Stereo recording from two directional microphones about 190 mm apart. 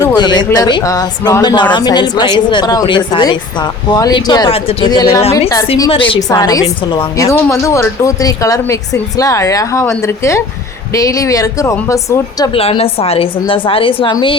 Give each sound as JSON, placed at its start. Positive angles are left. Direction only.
{"t": 0.0, "sound": "a woman's voice", "side_deg": 20}
{"t": 5.9, "sound": "a woman's voice", "side_deg": 25}
{"t": 10.9, "sound": "a woman's voice", "side_deg": 15}
{"t": 12.5, "sound": "a woman's voice", "side_deg": 30}